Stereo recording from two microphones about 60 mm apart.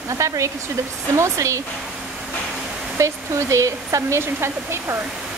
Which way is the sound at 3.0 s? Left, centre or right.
Right.